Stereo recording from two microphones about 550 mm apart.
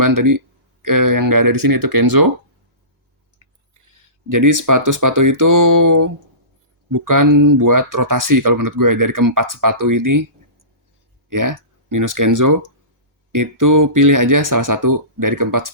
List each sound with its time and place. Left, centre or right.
0.0 s speech: right
3.3 s speech: right
11.3 s speech: right